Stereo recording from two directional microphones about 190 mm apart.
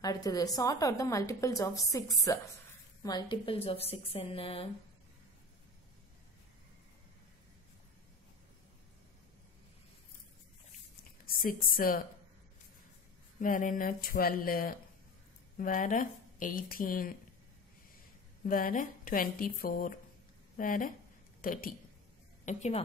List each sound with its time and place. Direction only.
0.0 s a woman's voice: 20° left (ahead or behind)
11.2 s a woman's voice: 50° left (ahead or behind)
13.4 s speech: 45° left (ahead or behind)
18.5 s a woman's voice: 45° left (ahead or behind)
22.4 s a woman's voice: 40° left (ahead or behind)